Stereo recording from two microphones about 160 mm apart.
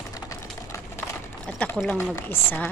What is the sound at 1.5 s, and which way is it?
Speech, 10° left (ahead or behind).